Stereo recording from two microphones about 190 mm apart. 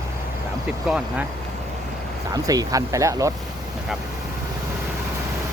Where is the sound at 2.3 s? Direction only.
20° right (ahead or behind).